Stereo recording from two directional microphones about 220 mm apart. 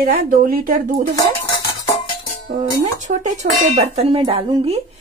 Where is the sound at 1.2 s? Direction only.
20° left (ahead or behind).